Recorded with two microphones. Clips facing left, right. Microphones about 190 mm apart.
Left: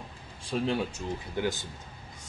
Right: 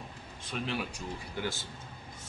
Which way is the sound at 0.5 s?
30° left (ahead or behind).